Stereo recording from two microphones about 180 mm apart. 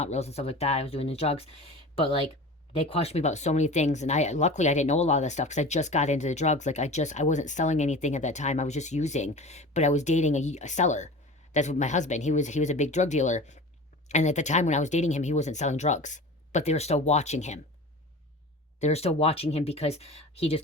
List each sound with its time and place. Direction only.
0.0 s speech: 40° left (ahead or behind)
18.8 s speech: 35° left (ahead or behind)